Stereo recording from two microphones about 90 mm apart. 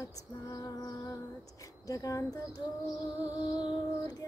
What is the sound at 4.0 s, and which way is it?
Child singing, 40° left (ahead or behind).